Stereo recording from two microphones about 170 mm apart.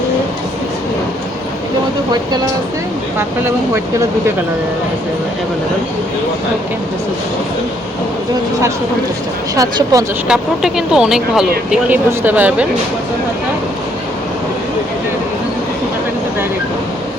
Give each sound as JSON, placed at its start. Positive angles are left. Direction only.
{"t": 9.6, "sound": "speech", "side_deg": -20}
{"t": 10.2, "sound": "speech", "side_deg": -5}